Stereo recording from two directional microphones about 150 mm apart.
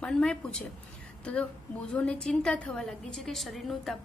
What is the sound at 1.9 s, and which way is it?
A woman's voice, 5° left (ahead or behind).